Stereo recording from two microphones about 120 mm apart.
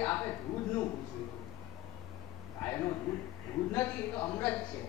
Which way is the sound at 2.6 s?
20° left (ahead or behind).